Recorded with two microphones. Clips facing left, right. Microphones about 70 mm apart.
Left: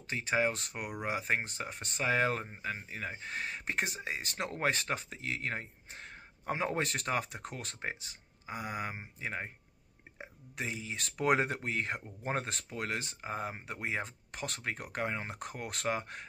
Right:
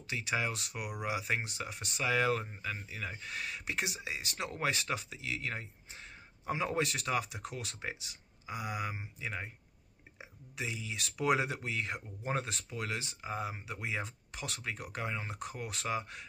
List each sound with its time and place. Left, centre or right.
0.0 s speech: left